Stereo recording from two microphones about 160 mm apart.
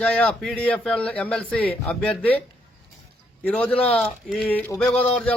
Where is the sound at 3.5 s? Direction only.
10° left (ahead or behind).